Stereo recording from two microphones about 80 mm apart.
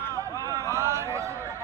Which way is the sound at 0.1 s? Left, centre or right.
Right.